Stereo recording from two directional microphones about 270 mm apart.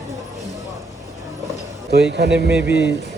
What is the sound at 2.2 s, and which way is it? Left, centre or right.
Speech, right.